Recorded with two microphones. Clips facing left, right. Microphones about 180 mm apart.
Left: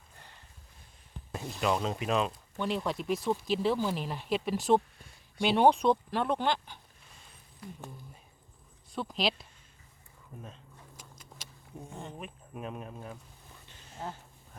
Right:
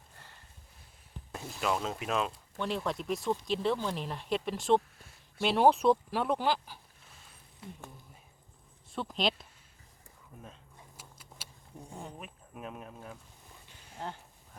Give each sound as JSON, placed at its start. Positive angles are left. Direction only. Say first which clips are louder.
{"t": 1.5, "sound": "speech", "louder": "left 2 dB", "side_deg": 0}
{"t": 7.6, "sound": "speech", "louder": "left 1 dB", "side_deg": -25}
{"t": 8.9, "sound": "speech", "louder": "even", "side_deg": 0}
{"t": 10.4, "sound": "a sound", "louder": "left 2 dB", "side_deg": -10}
{"t": 11.9, "sound": "speech", "louder": "even", "side_deg": -10}
{"t": 12.2, "sound": "speech", "louder": "left 3 dB", "side_deg": 0}
{"t": 13.7, "sound": "a sound", "louder": "even", "side_deg": -10}